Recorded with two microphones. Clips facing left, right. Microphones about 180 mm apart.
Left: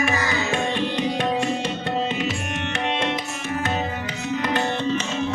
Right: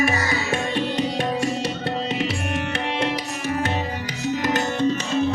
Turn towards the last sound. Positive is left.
turn(degrees=-40)  # may be behind; listen again after turning